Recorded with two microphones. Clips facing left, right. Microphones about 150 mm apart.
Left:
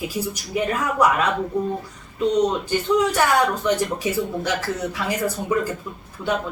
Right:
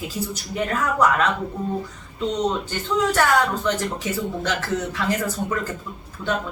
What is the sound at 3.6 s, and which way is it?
A woman's voice, 10° left (ahead or behind).